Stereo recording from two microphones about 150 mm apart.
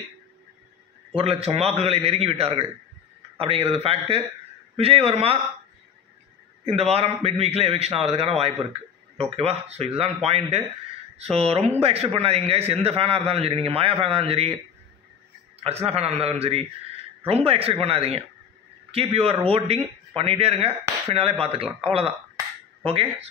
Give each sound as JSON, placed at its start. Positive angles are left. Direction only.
{"t": 1.1, "sound": "a man's voice", "side_deg": -40}
{"t": 6.6, "sound": "a man's voice", "side_deg": -45}
{"t": 15.6, "sound": "a man's voice", "side_deg": -45}